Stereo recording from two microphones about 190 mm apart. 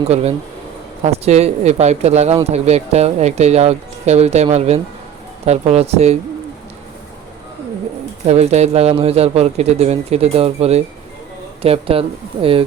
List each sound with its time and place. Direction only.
0.1 s speech: 35° right (ahead or behind)
8.3 s speech: 35° right (ahead or behind)